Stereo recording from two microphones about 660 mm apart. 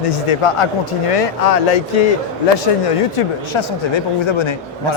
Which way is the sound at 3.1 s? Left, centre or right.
Left.